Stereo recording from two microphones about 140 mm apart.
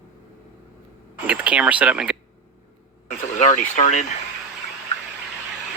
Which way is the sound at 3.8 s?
55° left (ahead or behind).